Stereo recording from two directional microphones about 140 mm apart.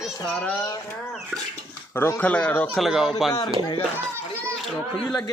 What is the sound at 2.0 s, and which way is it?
Speech, 15° left (ahead or behind).